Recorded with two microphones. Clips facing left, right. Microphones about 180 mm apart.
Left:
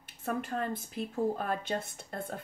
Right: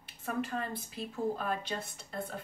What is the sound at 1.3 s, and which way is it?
Speech, 50° left (ahead or behind).